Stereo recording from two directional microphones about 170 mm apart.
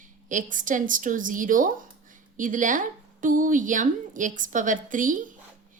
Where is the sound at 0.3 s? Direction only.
50° right (ahead or behind).